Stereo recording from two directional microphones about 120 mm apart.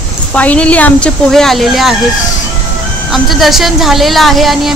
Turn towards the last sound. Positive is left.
turn(degrees=0)  # may be behind; listen again after turning